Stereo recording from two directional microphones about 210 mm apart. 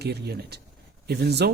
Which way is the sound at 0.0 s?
50° right (ahead or behind).